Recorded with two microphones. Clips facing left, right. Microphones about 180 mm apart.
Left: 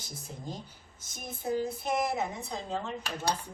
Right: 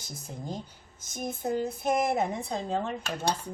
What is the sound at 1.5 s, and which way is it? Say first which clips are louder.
A woman's voice: right 2 dB; 50° right (ahead or behind).